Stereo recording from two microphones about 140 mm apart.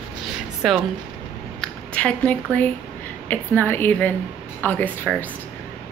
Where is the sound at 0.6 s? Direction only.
Centre (ahead or behind).